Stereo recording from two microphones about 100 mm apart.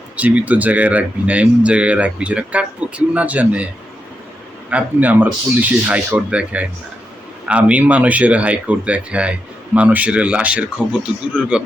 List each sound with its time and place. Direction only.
0.2 s speech: 15° right (ahead or behind)
4.7 s speech: 15° right (ahead or behind)